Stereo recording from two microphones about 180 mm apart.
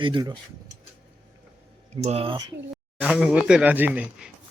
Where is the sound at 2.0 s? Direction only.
35° right (ahead or behind).